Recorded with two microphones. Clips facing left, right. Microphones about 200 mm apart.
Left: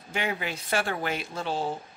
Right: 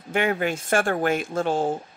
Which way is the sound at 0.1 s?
55° right (ahead or behind).